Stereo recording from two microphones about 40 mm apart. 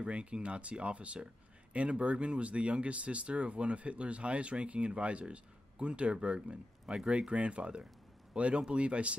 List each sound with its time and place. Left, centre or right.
0.0 s a man's voice: right